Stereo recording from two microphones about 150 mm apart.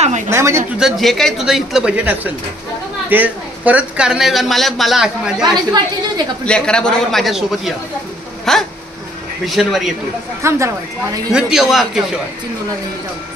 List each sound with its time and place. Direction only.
0.3 s speech: 20° right (ahead or behind)
0.7 s speech: centre (ahead or behind)
5.4 s a woman's voice: 30° right (ahead or behind)
6.4 s speech: 5° left (ahead or behind)
10.4 s a woman's voice: 20° right (ahead or behind)
11.3 s speech: 5° right (ahead or behind)